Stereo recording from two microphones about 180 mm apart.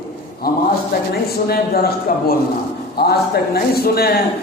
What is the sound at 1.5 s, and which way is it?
A man's voice, 55° left (ahead or behind).